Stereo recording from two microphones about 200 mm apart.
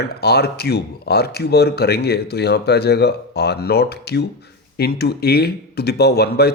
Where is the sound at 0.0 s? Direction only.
55° left (ahead or behind).